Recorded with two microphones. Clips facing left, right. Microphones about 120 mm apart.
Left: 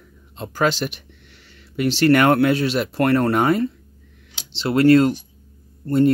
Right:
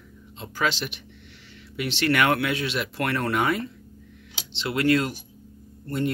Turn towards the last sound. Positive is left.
turn(degrees=35)  # may be behind; listen again after turning